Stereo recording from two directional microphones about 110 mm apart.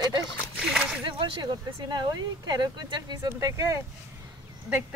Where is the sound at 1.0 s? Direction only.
50° right (ahead or behind).